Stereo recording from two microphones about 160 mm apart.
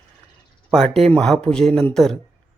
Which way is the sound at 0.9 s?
Centre (ahead or behind).